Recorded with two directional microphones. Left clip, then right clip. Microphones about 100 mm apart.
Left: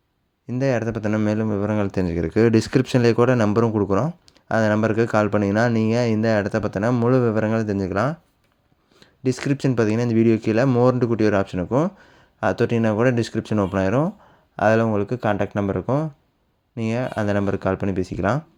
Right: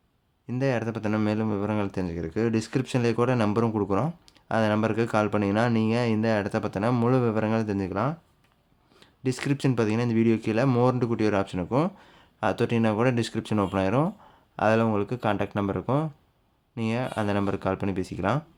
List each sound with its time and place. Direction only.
0.6 s speech: 35° left (ahead or behind)
1.9 s speech: 60° left (ahead or behind); by 18.4 s 35° left (ahead or behind)